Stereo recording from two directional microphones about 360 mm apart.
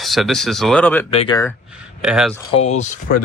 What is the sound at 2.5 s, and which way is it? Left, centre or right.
Speech, centre.